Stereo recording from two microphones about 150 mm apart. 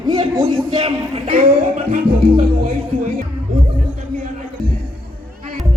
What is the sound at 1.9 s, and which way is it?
Music, 65° right (ahead or behind).